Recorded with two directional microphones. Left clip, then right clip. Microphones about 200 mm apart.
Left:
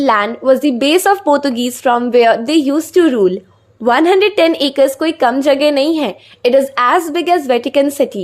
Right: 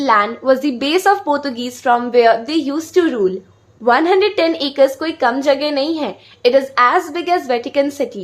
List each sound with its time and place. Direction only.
0.0 s a woman's voice: 30° left (ahead or behind)